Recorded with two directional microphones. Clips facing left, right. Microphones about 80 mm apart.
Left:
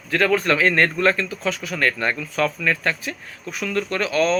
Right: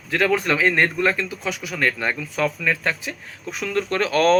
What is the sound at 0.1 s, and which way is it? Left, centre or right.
Speech, centre.